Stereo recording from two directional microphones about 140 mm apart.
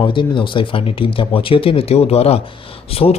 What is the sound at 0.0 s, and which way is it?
A man's voice, 35° left (ahead or behind).